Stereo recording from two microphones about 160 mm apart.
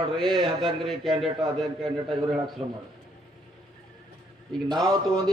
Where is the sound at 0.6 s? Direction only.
Centre (ahead or behind).